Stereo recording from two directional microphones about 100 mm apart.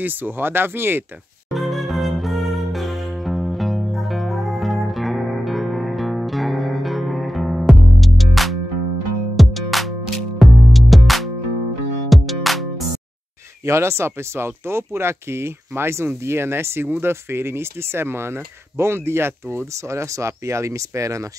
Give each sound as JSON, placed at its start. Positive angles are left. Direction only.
{"t": 0.0, "sound": "speech", "side_deg": -20}
{"t": 1.5, "sound": "music", "side_deg": 0}
{"t": 13.7, "sound": "speech", "side_deg": -25}